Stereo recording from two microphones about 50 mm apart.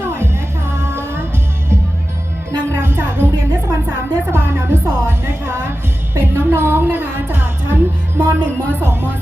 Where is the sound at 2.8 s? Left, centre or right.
Right.